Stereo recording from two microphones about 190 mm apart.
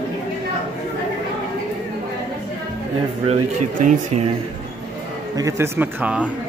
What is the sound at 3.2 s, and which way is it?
Speech, 40° right (ahead or behind).